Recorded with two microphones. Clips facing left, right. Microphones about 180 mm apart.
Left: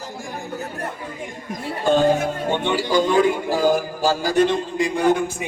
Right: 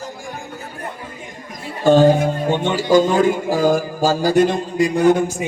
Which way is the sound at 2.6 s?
45° right (ahead or behind).